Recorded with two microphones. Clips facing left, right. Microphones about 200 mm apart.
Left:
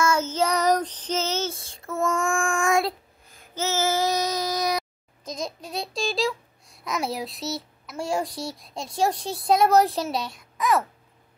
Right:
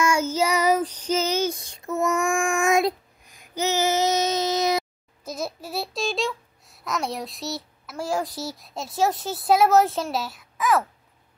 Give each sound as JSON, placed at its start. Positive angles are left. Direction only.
{"t": 0.0, "sound": "child singing", "side_deg": -10}
{"t": 5.2, "sound": "a child's voice", "side_deg": -5}